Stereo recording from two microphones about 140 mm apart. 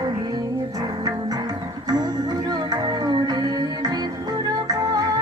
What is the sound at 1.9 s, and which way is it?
Music, 30° right (ahead or behind).